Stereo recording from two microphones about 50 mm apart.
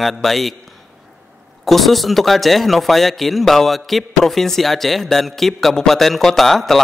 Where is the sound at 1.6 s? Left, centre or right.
Centre.